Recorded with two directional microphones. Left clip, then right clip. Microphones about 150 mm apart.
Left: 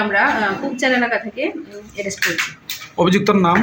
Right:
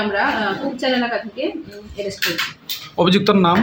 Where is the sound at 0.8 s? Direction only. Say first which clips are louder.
Left 4 dB; 10° left (ahead or behind).